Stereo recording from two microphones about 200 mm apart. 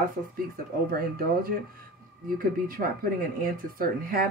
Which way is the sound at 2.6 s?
45° right (ahead or behind).